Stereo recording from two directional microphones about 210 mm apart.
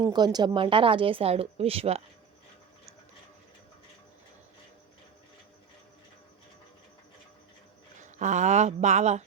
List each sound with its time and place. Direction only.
0.1 s speech: 20° right (ahead or behind)
8.0 s speech: 35° right (ahead or behind)